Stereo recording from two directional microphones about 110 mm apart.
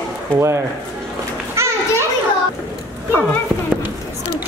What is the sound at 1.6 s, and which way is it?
Children playing, 25° right (ahead or behind).